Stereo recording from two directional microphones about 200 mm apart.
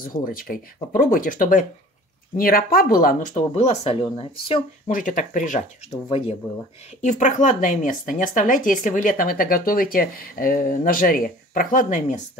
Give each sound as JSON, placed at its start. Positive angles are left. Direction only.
{"t": 0.0, "sound": "speech", "side_deg": 45}
{"t": 3.5, "sound": "speech", "side_deg": 30}
{"t": 4.9, "sound": "speech", "side_deg": 40}
{"t": 6.0, "sound": "speech", "side_deg": 30}